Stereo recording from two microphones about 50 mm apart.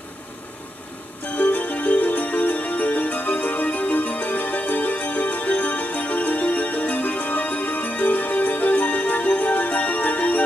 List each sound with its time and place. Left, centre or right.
1.2 s music: left